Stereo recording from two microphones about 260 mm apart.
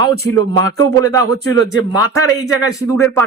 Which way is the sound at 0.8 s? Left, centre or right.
Centre.